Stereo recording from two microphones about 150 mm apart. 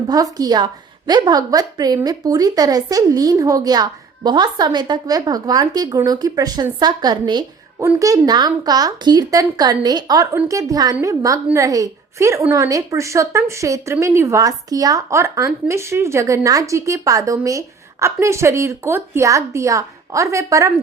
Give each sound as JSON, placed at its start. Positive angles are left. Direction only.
{"t": 0.1, "sound": "a woman's voice", "side_deg": -25}